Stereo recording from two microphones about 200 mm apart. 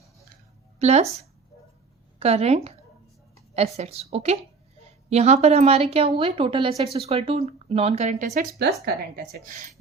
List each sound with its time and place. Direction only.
0.8 s a woman's voice: 35° right (ahead or behind)
3.8 s a woman's voice: 30° right (ahead or behind); by 9.6 s 50° right (ahead or behind)